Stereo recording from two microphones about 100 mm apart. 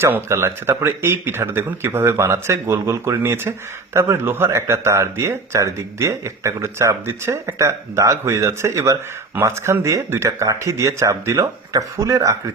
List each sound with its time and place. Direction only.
0.0 s a man's voice: 25° right (ahead or behind)